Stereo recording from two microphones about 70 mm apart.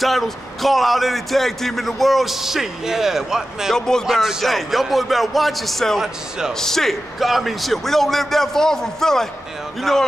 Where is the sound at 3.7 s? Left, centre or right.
Centre.